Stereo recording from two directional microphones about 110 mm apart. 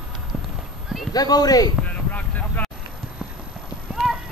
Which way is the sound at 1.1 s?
35° left (ahead or behind).